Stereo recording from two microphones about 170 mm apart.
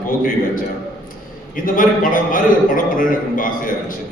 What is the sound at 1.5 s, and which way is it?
A man's voice, 55° left (ahead or behind).